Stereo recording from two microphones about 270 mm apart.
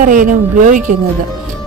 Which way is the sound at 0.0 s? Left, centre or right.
Right.